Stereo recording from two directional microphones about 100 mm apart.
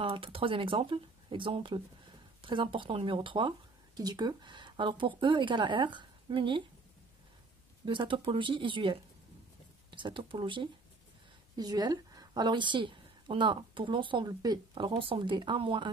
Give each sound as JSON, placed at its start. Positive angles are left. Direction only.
{"t": 0.0, "sound": "speech", "side_deg": -65}
{"t": 7.8, "sound": "speech", "side_deg": -55}
{"t": 11.5, "sound": "a woman's voice", "side_deg": -40}
{"t": 14.7, "sound": "speech", "side_deg": -60}